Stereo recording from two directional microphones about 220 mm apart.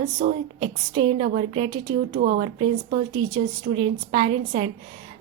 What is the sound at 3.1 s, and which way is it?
A woman's voice, 20° right (ahead or behind).